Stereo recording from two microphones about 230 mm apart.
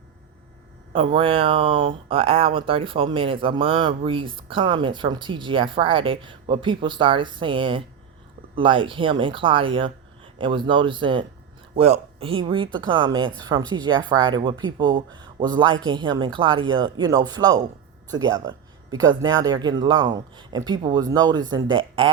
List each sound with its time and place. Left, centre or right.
0.9 s speech: right